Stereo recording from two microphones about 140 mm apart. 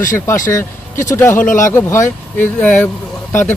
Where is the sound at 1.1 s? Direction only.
15° left (ahead or behind).